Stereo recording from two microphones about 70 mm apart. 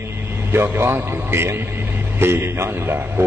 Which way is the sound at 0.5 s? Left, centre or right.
Right.